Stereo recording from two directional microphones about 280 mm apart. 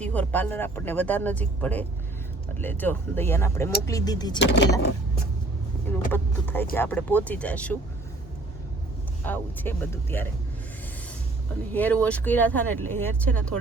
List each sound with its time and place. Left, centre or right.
0.0 s speech: centre
4.4 s speech: left
6.1 s speech: centre
9.2 s speech: centre
11.7 s speech: centre